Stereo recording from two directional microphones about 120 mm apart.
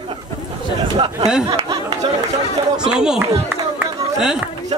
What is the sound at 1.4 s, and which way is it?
Speech, 30° right (ahead or behind).